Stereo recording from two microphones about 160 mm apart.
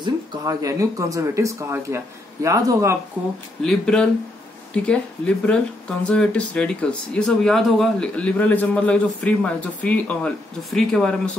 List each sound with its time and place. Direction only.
0.0 s speech: 20° right (ahead or behind)
3.6 s speech: 5° left (ahead or behind)